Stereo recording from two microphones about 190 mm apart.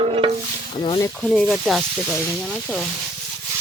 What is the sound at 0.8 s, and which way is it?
Speech, 25° left (ahead or behind).